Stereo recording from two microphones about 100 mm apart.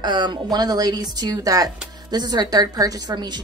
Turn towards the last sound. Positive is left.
turn(degrees=-45)  # may be behind; listen again after turning